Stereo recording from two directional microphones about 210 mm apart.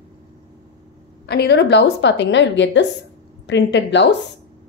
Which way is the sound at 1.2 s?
50° left (ahead or behind).